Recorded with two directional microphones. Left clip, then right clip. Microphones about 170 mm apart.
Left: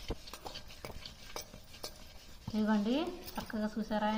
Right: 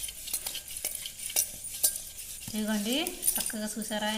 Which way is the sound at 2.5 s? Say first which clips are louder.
Right 2 dB; 30° right (ahead or behind).